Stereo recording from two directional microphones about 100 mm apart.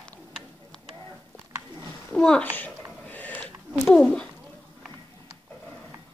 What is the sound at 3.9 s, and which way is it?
Speech, 10° left (ahead or behind).